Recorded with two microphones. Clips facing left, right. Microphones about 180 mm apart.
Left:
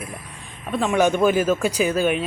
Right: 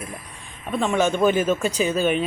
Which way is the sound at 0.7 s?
Centre (ahead or behind).